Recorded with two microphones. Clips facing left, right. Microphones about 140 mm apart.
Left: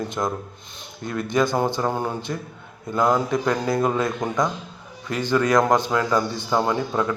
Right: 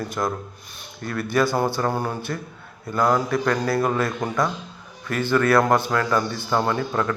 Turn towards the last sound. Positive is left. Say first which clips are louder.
# left 1 dB
turn(degrees=15)  # may be behind; listen again after turning